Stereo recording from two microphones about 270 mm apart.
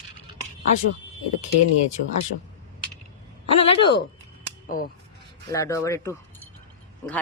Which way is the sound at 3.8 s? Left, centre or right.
Centre.